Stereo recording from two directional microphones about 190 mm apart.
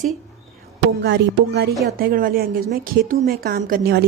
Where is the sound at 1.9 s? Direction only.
50° right (ahead or behind).